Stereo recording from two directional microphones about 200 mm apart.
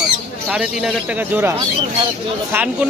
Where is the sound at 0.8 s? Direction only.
5° right (ahead or behind).